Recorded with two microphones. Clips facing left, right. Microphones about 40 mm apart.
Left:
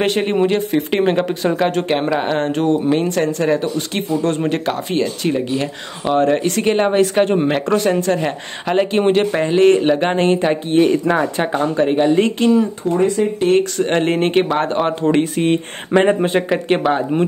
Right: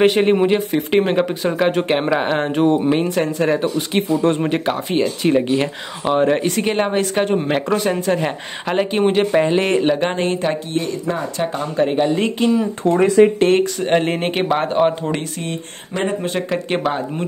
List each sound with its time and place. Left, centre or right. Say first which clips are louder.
0.0 s speech: right 2 dB; centre; by 4.4 s right
4.4 s speech: even; centre
10.7 s speech: left 9 dB; left
11.1 s speech: left 4 dB; left
11.7 s speech: left 2 dB; centre
12.8 s speech: right 2 dB; right
13.6 s speech: left 1 dB; centre
15.3 s speech: left 10 dB; left
16.4 s speech: left 4 dB; centre